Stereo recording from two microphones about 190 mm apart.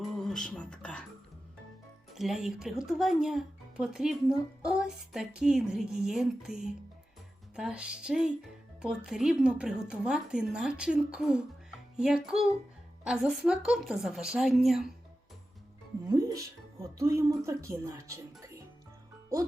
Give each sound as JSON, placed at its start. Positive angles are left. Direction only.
{"t": 0.0, "sound": "a sound", "side_deg": 5}
{"t": 2.1, "sound": "speech", "side_deg": 0}
{"t": 16.0, "sound": "music", "side_deg": -15}
{"t": 17.0, "sound": "a woman's voice", "side_deg": -15}